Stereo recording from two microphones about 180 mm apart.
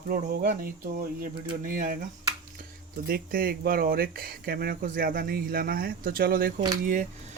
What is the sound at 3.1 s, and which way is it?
Speech, 55° right (ahead or behind).